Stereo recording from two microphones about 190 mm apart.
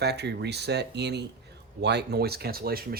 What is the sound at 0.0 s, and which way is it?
Speech, 60° right (ahead or behind).